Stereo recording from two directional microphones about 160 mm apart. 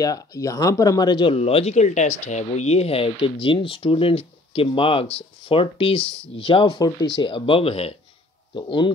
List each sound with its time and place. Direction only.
0.0 s speech: 20° left (ahead or behind)